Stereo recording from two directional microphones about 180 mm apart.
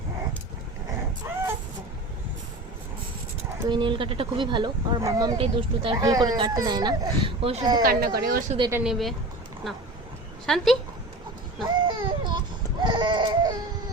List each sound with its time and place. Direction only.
1.2 s a sound: 15° right (ahead or behind)
3.7 s speech: 25° right (ahead or behind)
5.4 s speech: 30° right (ahead or behind)
7.8 s speech: 55° right (ahead or behind)
8.7 s speech: 5° right (ahead or behind)
10.4 s speech: centre (ahead or behind)
11.6 s a sound: 25° right (ahead or behind)
12.8 s baby cry: 25° right (ahead or behind)